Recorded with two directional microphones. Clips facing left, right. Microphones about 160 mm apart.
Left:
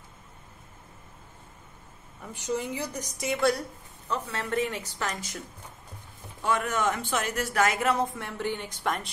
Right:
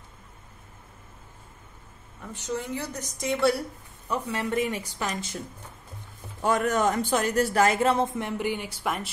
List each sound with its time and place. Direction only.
2.5 s a woman's voice: 15° left (ahead or behind)
4.1 s speech: 10° right (ahead or behind)
6.4 s a man's voice: 40° right (ahead or behind); by 9.1 s 5° right (ahead or behind)